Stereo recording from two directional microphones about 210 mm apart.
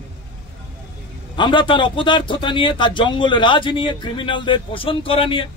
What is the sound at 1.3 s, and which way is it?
A man's voice, 25° left (ahead or behind).